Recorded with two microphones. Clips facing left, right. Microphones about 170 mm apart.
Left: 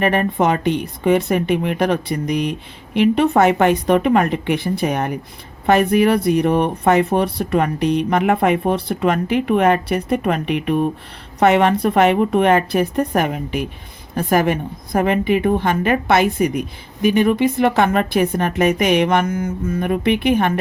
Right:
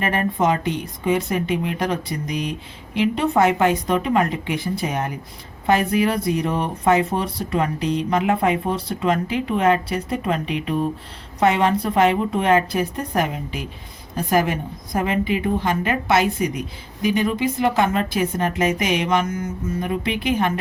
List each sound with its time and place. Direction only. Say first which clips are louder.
0.0 s speech: left 4 dB; 65° left (ahead or behind)